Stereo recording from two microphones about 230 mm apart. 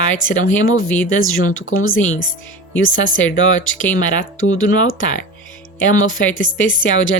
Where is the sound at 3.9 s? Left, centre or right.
Left.